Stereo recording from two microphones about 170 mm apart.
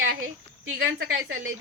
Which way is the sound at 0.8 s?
90° right.